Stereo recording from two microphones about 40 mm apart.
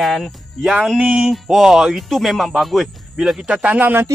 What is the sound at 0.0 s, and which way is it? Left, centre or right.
Speech, centre.